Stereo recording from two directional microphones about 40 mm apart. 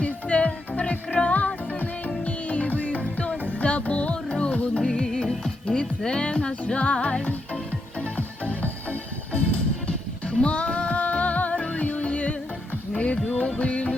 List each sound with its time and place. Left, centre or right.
0.0 s music: left